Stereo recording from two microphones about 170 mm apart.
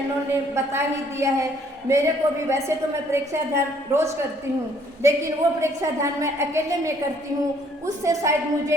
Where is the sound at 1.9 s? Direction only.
20° right (ahead or behind).